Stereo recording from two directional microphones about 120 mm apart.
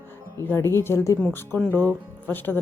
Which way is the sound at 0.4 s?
20° left (ahead or behind).